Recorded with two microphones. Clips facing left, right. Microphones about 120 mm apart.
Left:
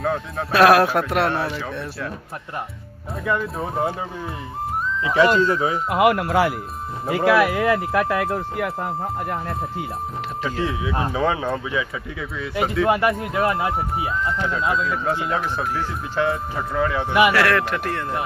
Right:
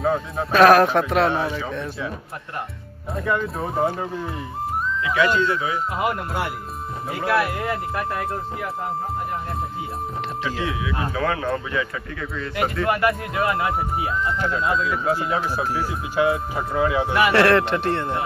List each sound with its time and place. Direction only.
0.0 s speech: centre (ahead or behind)
3.3 s speech: centre (ahead or behind)
5.0 s speech: 35° left (ahead or behind)
5.9 s speech: 75° left (ahead or behind)
10.4 s speech: centre (ahead or behind)
10.8 s speech: 30° left (ahead or behind)
11.4 s speech: 5° left (ahead or behind)
12.8 s speech: 20° left (ahead or behind)
14.4 s speech: centre (ahead or behind)
17.3 s speech: 30° right (ahead or behind)